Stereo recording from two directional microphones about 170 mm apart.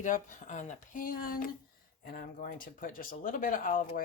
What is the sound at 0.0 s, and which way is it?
Speech, 45° left (ahead or behind).